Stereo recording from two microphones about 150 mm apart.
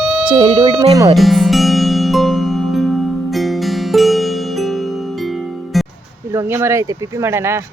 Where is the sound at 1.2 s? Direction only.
Centre (ahead or behind).